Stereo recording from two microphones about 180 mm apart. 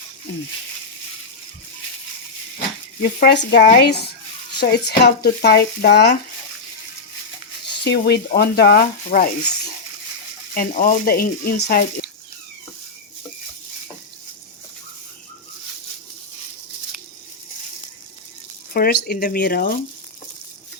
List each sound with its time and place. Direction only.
2.6 s speech: 55° left (ahead or behind)
7.9 s speech: 65° left (ahead or behind)
10.5 s speech: 50° left (ahead or behind)
18.7 s speech: 55° left (ahead or behind)